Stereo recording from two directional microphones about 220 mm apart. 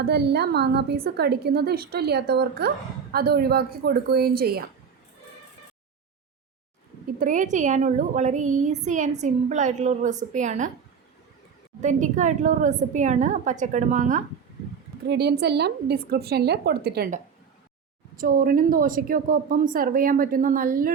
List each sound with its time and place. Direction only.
0.0 s a woman's voice: 50° right (ahead or behind)
7.2 s a woman's voice: 35° right (ahead or behind)
11.8 s a woman's voice: 35° right (ahead or behind)
15.0 s a woman's voice: 50° right (ahead or behind)
18.2 s a woman's voice: 40° right (ahead or behind)